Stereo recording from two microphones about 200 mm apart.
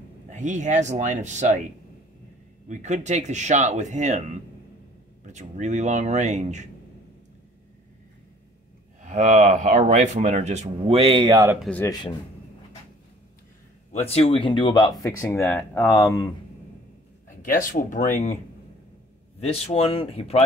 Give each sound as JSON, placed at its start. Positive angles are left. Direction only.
{"t": 0.3, "sound": "speech", "side_deg": -35}
{"t": 2.7, "sound": "speech", "side_deg": -35}
{"t": 9.0, "sound": "speech", "side_deg": -40}
{"t": 11.6, "sound": "speech", "side_deg": 10}
{"t": 13.9, "sound": "speech", "side_deg": 30}
{"t": 17.4, "sound": "speech", "side_deg": 45}
{"t": 19.4, "sound": "speech", "side_deg": 30}